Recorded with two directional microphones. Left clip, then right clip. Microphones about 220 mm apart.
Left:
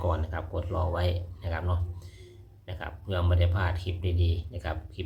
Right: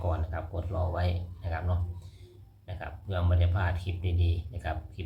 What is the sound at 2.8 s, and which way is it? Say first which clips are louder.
Speech: left 3 dB; 15° left (ahead or behind).